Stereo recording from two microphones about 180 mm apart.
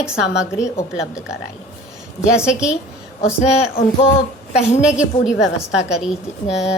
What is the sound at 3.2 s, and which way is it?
Speech, 35° left (ahead or behind).